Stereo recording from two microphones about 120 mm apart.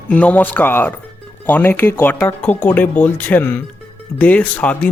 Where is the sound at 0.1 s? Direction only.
10° left (ahead or behind).